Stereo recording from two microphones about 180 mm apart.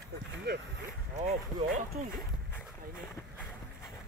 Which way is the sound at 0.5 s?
70° right (ahead or behind).